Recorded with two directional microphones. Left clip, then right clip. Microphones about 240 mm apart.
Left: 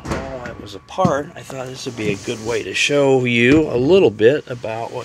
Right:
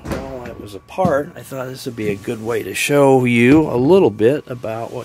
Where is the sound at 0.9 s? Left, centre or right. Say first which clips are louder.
Right 1 dB; right.